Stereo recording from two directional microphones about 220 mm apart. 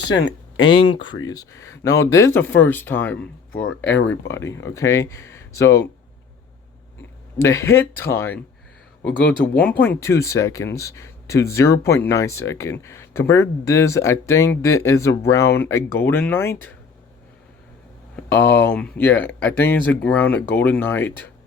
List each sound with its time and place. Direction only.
0.1 s a sound: 55° left (ahead or behind)
0.6 s speech: 25° left (ahead or behind); by 3.7 s 10° left (ahead or behind)
3.9 s speech: 55° left (ahead or behind)
4.3 s speech: 10° left (ahead or behind)
7.3 s speech: 10° left (ahead or behind)
18.2 s speech: 10° left (ahead or behind)